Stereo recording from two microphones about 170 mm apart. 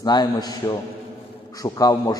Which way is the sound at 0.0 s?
25° left (ahead or behind).